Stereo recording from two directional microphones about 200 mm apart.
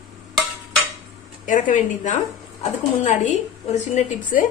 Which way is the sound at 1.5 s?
40° left (ahead or behind).